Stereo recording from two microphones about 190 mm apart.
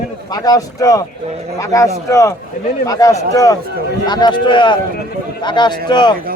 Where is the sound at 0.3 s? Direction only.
20° left (ahead or behind).